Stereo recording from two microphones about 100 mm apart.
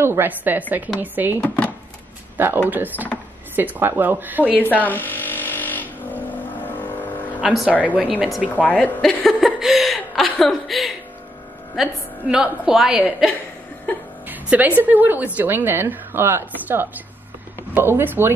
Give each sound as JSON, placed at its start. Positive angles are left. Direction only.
{"t": 0.0, "sound": "a woman's voice", "side_deg": -25}
{"t": 4.6, "sound": "vehicle", "side_deg": 15}
{"t": 7.8, "sound": "a woman's voice", "side_deg": -15}
{"t": 8.5, "sound": "speech", "side_deg": 15}
{"t": 9.0, "sound": "speech", "side_deg": 0}
{"t": 14.2, "sound": "a sound", "side_deg": -15}
{"t": 14.8, "sound": "a woman's voice", "side_deg": -20}